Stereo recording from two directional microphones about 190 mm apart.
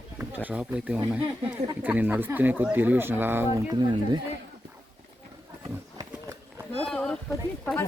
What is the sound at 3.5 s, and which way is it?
Speech, 20° right (ahead or behind).